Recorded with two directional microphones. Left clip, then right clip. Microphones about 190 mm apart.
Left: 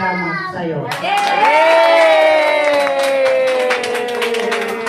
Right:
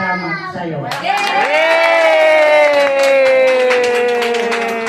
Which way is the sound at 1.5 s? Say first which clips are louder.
Left 2 dB; 15° right (ahead or behind).